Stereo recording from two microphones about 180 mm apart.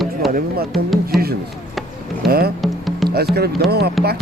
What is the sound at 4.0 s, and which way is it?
Speech, centre (ahead or behind).